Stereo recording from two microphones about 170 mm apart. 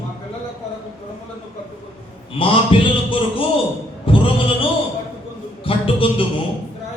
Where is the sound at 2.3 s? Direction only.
30° left (ahead or behind).